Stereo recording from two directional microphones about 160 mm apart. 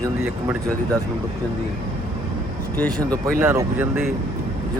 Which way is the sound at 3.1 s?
15° right (ahead or behind).